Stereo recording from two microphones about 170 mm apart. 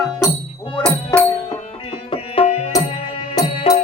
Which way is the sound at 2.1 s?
35° left (ahead or behind).